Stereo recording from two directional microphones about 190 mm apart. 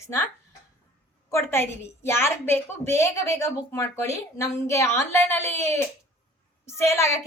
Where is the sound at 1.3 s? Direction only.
15° left (ahead or behind).